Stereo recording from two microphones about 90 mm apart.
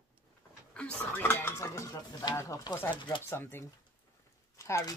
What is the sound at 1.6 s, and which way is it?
Speech, 40° left (ahead or behind).